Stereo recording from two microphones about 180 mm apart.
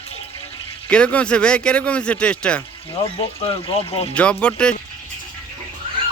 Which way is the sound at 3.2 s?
30° left (ahead or behind).